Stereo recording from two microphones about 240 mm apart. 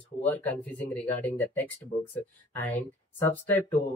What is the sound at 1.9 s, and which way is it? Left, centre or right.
Speech, left.